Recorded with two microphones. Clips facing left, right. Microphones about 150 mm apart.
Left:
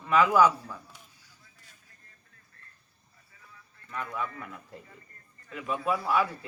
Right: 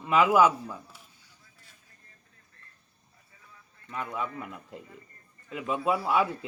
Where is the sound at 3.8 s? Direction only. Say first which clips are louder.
Right 1 dB; 20° right (ahead or behind).